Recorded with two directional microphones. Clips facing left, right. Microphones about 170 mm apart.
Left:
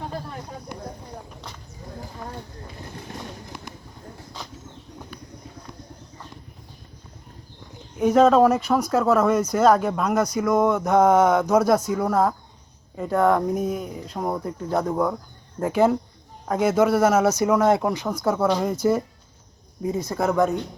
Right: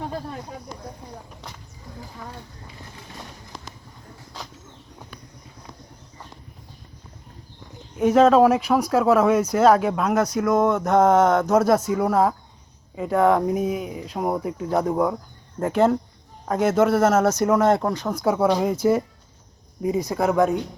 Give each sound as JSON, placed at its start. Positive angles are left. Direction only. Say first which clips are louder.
{"t": 3.1, "sound": "a sound", "louder": "left 3 dB", "side_deg": 55}
{"t": 3.5, "sound": "pigeon", "louder": "left 2 dB", "side_deg": 60}
{"t": 7.9, "sound": "speech", "louder": "right 1 dB", "side_deg": -5}
{"t": 15.6, "sound": "speech", "louder": "even", "side_deg": 0}
{"t": 18.1, "sound": "speech", "louder": "right 3 dB", "side_deg": -5}
{"t": 19.9, "sound": "speech", "louder": "right 2 dB", "side_deg": -15}